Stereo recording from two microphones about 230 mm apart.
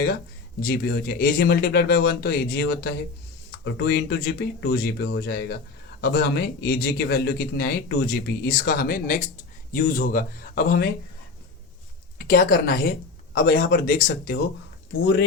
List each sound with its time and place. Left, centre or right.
0.6 s speech: left
12.2 s speech: left